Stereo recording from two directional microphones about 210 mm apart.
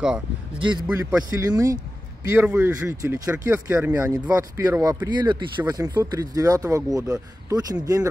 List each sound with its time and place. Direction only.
0.6 s a man's voice: 20° right (ahead or behind)